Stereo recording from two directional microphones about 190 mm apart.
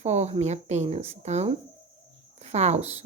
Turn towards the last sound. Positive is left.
turn(degrees=-35)  # may be behind; listen again after turning